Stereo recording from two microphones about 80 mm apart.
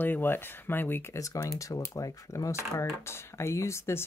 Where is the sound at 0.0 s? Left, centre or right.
Left.